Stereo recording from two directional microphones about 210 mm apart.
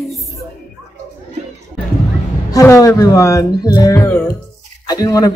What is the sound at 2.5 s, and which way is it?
A woman's voice, 15° left (ahead or behind).